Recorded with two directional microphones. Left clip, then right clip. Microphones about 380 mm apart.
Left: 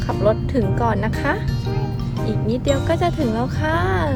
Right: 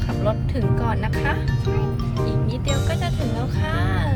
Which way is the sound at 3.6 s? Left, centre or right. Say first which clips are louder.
Left 7 dB; left.